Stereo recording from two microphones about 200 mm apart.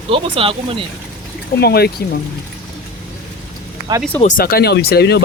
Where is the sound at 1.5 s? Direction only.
55° left (ahead or behind).